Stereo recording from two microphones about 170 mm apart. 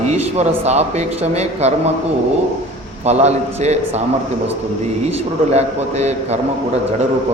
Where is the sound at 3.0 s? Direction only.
40° right (ahead or behind).